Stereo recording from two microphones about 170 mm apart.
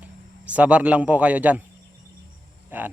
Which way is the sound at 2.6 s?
10° right (ahead or behind).